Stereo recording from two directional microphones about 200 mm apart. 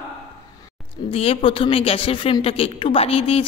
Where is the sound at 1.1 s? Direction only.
30° left (ahead or behind).